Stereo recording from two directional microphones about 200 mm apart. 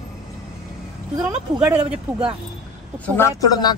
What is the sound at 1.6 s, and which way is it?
Speech, 5° right (ahead or behind).